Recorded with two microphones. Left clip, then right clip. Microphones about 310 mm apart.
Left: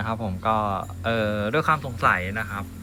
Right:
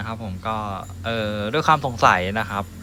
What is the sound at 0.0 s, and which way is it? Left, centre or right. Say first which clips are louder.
Speech: left 3 dB; centre.